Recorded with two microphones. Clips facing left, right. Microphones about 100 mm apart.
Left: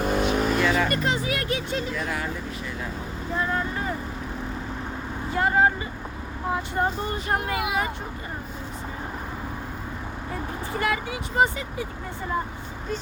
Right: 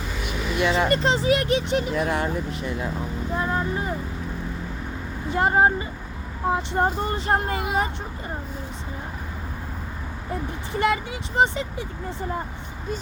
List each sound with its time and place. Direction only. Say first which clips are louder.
0.0 s vehicle: left 8 dB; 55° left (ahead or behind)
0.6 s speech: right 2 dB; 25° right (ahead or behind)
2.0 s speech: right 5 dB; 35° right (ahead or behind)
3.3 s speech: right 1 dB; 20° right (ahead or behind)
5.3 s speech: right 2 dB; 25° right (ahead or behind)
6.7 s speech: right 3 dB; 35° right (ahead or behind)
10.7 s speech: right 4 dB; 25° right (ahead or behind)